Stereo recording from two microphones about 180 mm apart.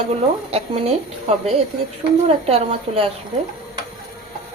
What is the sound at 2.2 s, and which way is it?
Speech, 35° right (ahead or behind).